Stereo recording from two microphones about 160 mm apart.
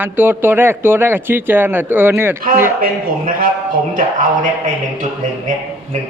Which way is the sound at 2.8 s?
60° right (ahead or behind).